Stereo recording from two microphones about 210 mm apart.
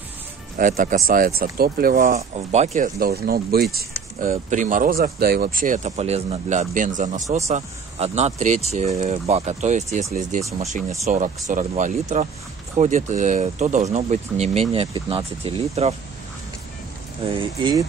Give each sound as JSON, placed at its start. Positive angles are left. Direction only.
{"t": 0.6, "sound": "speech", "side_deg": -40}
{"t": 11.1, "sound": "speech", "side_deg": -35}
{"t": 17.2, "sound": "speech", "side_deg": -25}